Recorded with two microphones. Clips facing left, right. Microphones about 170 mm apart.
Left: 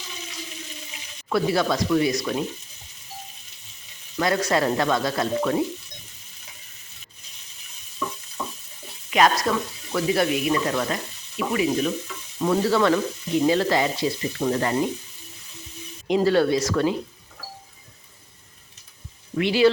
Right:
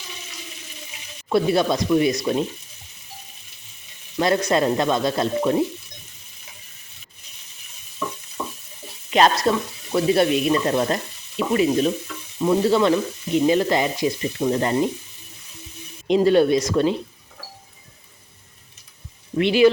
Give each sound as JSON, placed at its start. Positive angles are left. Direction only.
{"t": 1.3, "sound": "frying", "side_deg": -25}
{"t": 4.2, "sound": "frying", "side_deg": -25}
{"t": 9.0, "sound": "speech", "side_deg": -30}
{"t": 9.9, "sound": "frying", "side_deg": -25}
{"t": 16.0, "sound": "frying", "side_deg": -20}
{"t": 19.4, "sound": "frying", "side_deg": -20}